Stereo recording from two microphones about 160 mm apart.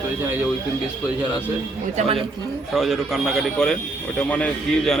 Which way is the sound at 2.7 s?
Centre (ahead or behind).